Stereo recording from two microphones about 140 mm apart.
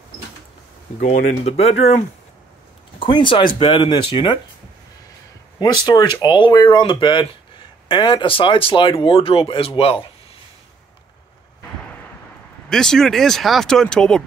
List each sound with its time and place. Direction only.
1.0 s speech: 50° left (ahead or behind)
3.0 s speech: 35° left (ahead or behind)
5.6 s speech: 30° left (ahead or behind)
12.6 s speech: 5° left (ahead or behind)